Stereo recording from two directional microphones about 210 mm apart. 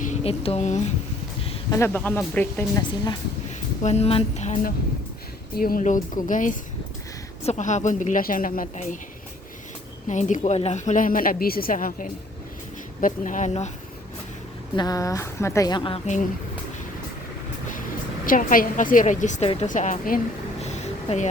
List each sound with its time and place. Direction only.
0.0 s speech: 30° left (ahead or behind)
1.7 s speech: 10° left (ahead or behind)
3.8 s a woman's voice: 30° left (ahead or behind)
5.5 s a woman's voice: 45° left (ahead or behind)
10.1 s a woman's voice: 35° left (ahead or behind)
14.8 s speech: 15° left (ahead or behind)
18.3 s a woman's voice: 40° left (ahead or behind)